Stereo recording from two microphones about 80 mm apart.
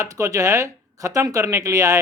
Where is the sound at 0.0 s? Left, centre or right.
Right.